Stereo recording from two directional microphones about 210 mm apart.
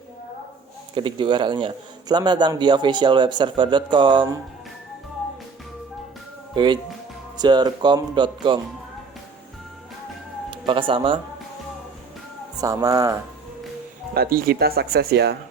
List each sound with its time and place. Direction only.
0.9 s a man's voice: 25° right (ahead or behind)
7.3 s a man's voice: 20° right (ahead or behind)
10.5 s speech: 25° right (ahead or behind)
12.5 s speech: 15° right (ahead or behind)
14.1 s speech: 45° right (ahead or behind)